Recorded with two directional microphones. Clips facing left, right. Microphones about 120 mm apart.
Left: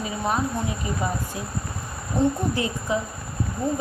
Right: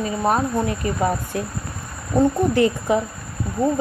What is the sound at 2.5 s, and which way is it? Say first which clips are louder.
Speech: right 8 dB; 60° right (ahead or behind).